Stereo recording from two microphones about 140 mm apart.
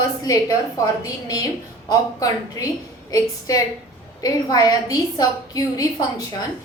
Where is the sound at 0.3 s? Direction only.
25° left (ahead or behind).